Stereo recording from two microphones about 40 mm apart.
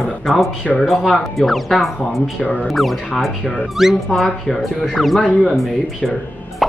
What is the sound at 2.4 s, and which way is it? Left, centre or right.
Speech, left.